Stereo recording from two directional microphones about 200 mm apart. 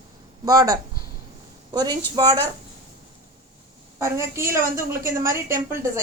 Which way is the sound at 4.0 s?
15° right (ahead or behind).